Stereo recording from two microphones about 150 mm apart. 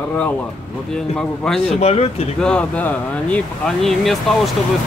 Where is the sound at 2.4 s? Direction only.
10° left (ahead or behind).